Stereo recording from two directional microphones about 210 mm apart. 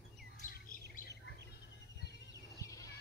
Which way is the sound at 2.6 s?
15° left (ahead or behind).